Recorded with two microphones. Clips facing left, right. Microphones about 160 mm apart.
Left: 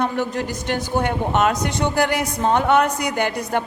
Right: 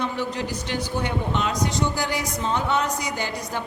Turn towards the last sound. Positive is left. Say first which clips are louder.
# left 7 dB
turn(degrees=60)  # may be behind; listen again after turning